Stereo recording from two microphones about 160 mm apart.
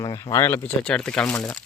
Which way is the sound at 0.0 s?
25° left (ahead or behind).